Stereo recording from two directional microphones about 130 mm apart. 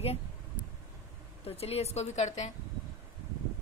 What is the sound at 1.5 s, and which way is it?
A woman's voice, 50° left (ahead or behind).